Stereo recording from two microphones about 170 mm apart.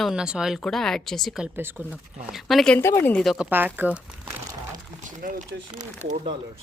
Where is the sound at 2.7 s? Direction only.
15° left (ahead or behind).